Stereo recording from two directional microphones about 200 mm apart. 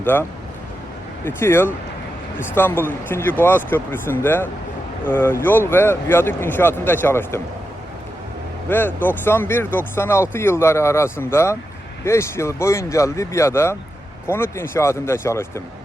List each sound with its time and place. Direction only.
0.0 s speech: 10° left (ahead or behind)
8.7 s speech: 10° left (ahead or behind)